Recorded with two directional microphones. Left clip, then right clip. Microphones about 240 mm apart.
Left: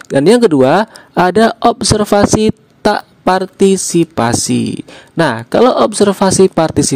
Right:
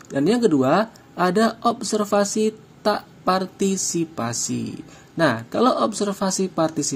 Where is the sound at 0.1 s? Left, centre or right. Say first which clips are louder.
Left 11 dB; left.